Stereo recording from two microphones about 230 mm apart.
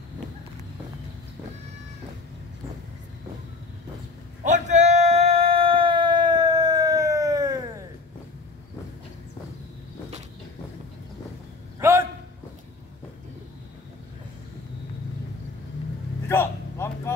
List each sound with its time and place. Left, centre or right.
4.5 s male singing: right; by 7.8 s centre
11.8 s a sound: centre
16.3 s vehicle: centre